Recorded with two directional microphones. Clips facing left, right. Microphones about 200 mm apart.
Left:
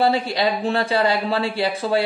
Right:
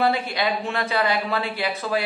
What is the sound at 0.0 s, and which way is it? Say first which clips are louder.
Speech: left 3 dB; 30° left (ahead or behind).